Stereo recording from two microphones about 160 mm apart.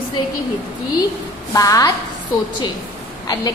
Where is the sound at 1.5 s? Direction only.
20° left (ahead or behind).